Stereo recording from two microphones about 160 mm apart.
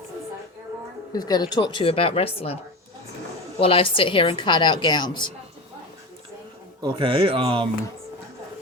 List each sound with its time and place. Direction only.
1.1 s speech: 25° left (ahead or behind)
3.6 s a woman's voice: 35° left (ahead or behind)
6.8 s speech: 35° right (ahead or behind)